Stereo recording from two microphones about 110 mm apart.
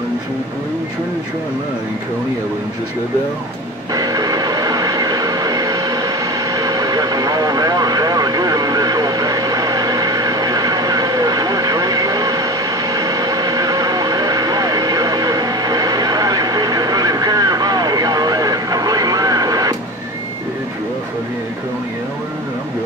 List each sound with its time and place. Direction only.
3.9 s train: 35° right (ahead or behind)